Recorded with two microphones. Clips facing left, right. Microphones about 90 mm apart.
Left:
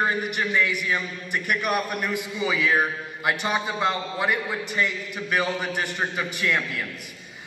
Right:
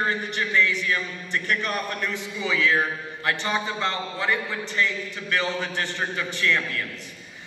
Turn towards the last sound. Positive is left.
turn(degrees=10)  # may be behind; listen again after turning